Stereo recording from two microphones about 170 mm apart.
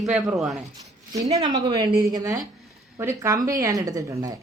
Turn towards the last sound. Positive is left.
turn(degrees=-20)  # may be behind; listen again after turning